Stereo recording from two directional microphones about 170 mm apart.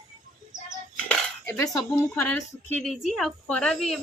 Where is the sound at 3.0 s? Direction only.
Centre (ahead or behind).